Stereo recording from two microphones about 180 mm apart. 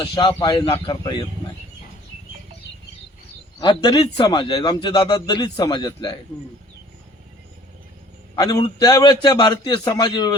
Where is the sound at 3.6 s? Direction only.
25° left (ahead or behind).